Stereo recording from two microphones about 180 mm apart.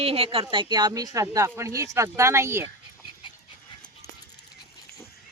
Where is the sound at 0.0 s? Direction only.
35° right (ahead or behind); by 2.6 s 15° right (ahead or behind).